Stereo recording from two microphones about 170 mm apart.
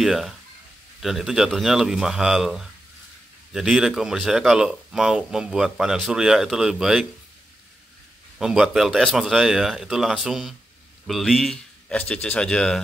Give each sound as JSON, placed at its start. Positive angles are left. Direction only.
{"t": 0.0, "sound": "speech", "side_deg": 0}
{"t": 8.4, "sound": "speech", "side_deg": -5}